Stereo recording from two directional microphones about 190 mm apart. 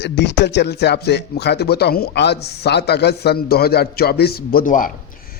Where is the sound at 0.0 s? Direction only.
65° left (ahead or behind).